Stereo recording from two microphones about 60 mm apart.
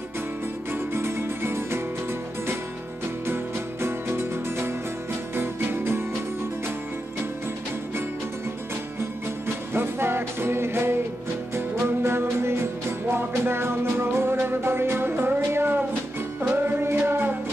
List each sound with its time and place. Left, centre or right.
0.7 s music: right
3.8 s music: right
9.8 s music: right